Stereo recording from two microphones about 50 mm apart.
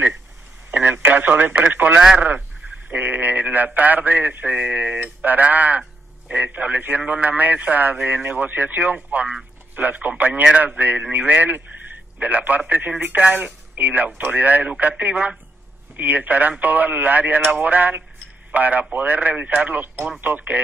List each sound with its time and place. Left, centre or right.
0.7 s speech: right